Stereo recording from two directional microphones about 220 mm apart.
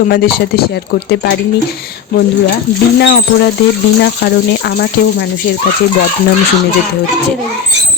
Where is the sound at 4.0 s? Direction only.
50° left (ahead or behind).